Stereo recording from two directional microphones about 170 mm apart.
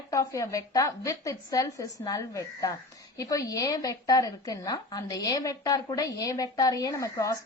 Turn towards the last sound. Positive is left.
turn(degrees=20)  # may be behind; listen again after turning